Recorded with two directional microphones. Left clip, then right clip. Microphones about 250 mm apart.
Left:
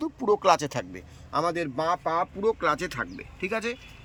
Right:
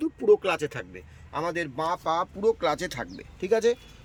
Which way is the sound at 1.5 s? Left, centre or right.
Right.